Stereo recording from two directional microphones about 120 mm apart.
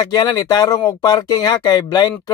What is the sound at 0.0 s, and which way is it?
Speech, 35° left (ahead or behind).